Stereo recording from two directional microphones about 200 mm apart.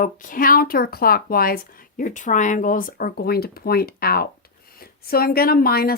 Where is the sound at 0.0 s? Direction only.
45° left (ahead or behind).